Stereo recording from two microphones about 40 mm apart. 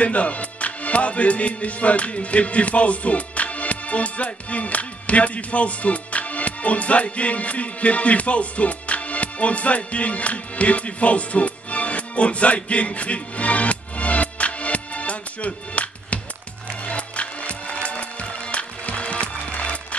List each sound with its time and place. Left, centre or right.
0.0 s music: left